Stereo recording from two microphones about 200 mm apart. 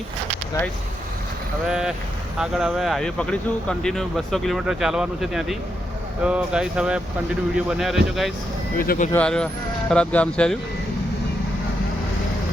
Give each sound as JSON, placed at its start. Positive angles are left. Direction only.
{"t": 1.6, "sound": "speech", "side_deg": -5}
{"t": 8.8, "sound": "speech", "side_deg": 45}
{"t": 9.1, "sound": "speech", "side_deg": 5}